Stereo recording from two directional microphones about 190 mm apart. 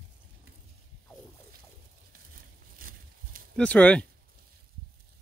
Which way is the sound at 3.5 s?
5° left (ahead or behind).